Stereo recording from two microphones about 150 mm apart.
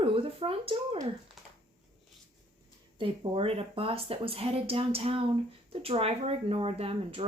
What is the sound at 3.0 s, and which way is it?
Speech, 40° right (ahead or behind).